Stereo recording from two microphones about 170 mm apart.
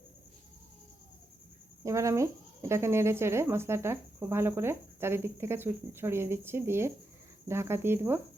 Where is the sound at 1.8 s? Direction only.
20° right (ahead or behind).